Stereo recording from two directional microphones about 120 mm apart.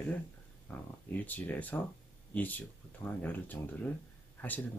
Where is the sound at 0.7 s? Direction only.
15° left (ahead or behind).